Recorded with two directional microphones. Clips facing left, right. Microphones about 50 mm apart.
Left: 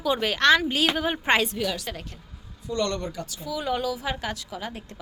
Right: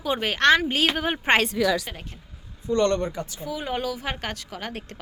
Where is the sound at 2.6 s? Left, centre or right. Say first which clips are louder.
Right 5 dB; right.